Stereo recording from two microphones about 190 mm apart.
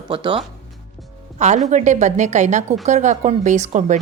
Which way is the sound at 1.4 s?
35° right (ahead or behind).